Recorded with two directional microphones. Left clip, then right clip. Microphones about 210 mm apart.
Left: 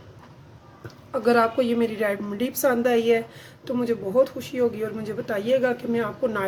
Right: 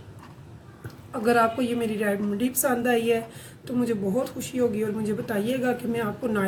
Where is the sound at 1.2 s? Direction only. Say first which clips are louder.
Left 2 dB; 35° left (ahead or behind).